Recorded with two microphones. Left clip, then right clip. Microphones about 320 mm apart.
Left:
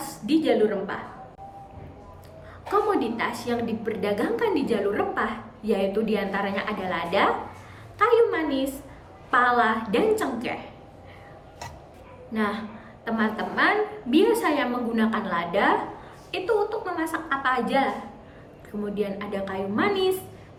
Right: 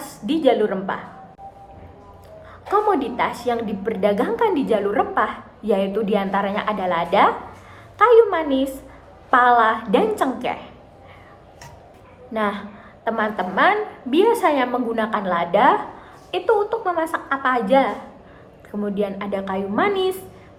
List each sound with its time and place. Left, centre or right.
0.0 s a woman's voice: centre
2.9 s a woman's voice: centre
12.3 s a woman's voice: centre
18.9 s a woman's voice: centre
20.0 s a woman's voice: centre